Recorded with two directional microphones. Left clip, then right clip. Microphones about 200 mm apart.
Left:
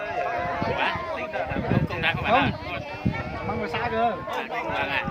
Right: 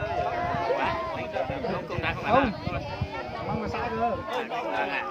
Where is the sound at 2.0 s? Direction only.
40° left (ahead or behind).